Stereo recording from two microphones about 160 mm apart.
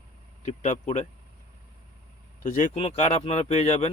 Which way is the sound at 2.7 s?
40° left (ahead or behind).